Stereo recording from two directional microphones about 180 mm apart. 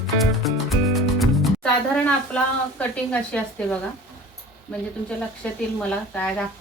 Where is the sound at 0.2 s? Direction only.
Centre (ahead or behind).